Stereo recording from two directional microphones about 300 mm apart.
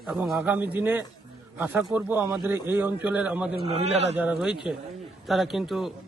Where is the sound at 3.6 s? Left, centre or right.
Right.